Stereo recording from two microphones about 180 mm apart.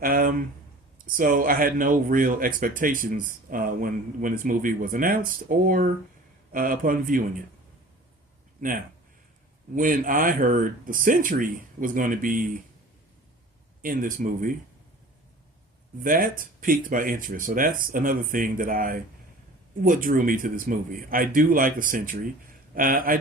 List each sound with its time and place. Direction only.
0.0 s a sound: 50° right (ahead or behind)
1.0 s speech: 50° right (ahead or behind)
8.6 s speech: 50° right (ahead or behind)
13.8 s speech: 50° right (ahead or behind)
16.0 s speech: 50° right (ahead or behind)